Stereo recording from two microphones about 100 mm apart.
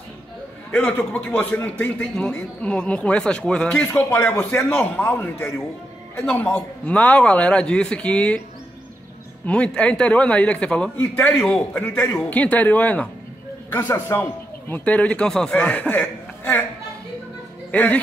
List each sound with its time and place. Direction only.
0.7 s a man's voice: 15° left (ahead or behind)
9.5 s a man's voice: 10° left (ahead or behind)
11.3 s a man's voice: 5° left (ahead or behind)
17.6 s speech: 15° left (ahead or behind)